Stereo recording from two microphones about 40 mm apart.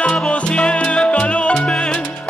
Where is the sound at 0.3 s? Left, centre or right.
Left.